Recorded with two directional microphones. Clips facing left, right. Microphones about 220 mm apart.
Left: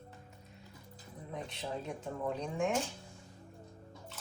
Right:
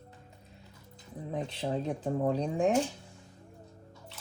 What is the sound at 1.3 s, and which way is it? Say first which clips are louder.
Speech: right 7 dB; 30° right (ahead or behind).